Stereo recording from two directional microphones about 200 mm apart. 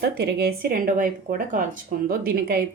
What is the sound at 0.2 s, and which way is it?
Speech, 50° right (ahead or behind).